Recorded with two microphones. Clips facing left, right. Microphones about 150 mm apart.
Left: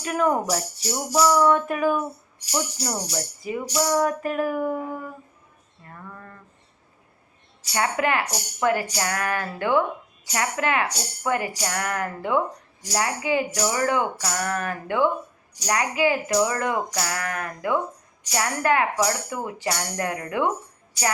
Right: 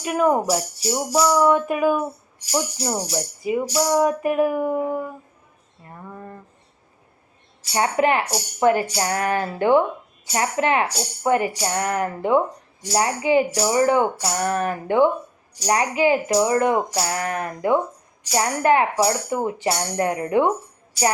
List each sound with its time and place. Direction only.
0.0 s music: 15° right (ahead or behind)
5.8 s speech: 20° right (ahead or behind)
7.7 s speech: 25° right (ahead or behind)